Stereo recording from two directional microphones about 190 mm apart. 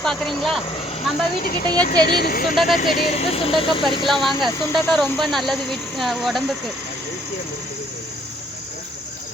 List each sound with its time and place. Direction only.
0.0 s speech: centre (ahead or behind)
1.5 s speech: 55° left (ahead or behind)
3.2 s speech: 30° left (ahead or behind)
4.0 s speech: centre (ahead or behind)